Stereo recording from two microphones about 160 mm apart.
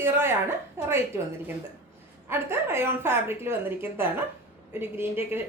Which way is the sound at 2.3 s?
15° right (ahead or behind).